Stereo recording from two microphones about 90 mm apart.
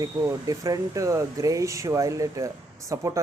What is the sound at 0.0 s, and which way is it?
Speech, 45° right (ahead or behind).